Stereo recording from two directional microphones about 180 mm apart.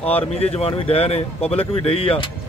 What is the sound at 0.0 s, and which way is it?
Speech, 35° left (ahead or behind).